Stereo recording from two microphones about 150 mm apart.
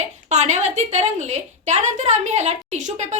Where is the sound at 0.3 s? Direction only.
50° right (ahead or behind).